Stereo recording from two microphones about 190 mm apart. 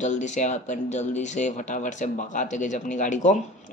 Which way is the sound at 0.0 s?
40° left (ahead or behind).